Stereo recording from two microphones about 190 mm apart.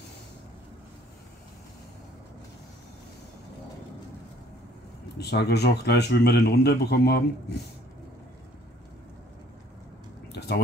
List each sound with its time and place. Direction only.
5.1 s speech: 60° left (ahead or behind)